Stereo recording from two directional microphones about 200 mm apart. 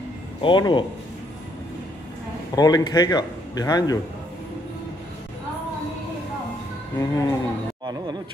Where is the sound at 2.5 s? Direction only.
20° left (ahead or behind).